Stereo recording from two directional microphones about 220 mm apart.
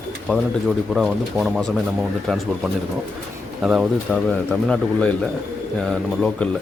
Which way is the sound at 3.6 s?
Centre (ahead or behind).